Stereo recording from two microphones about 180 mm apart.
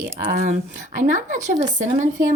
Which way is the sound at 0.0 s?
50° right (ahead or behind).